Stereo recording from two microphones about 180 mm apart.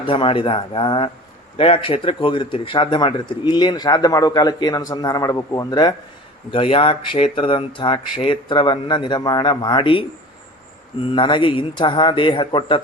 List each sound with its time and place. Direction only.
0.0 s a man's voice: 30° left (ahead or behind)
11.0 s a man's voice: 25° left (ahead or behind)